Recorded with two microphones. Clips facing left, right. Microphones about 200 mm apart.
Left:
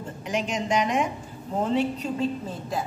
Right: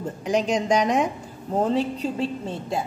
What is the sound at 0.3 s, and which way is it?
A woman's voice, 40° right (ahead or behind).